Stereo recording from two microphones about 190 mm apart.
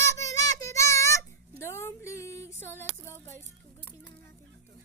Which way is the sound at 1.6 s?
15° left (ahead or behind).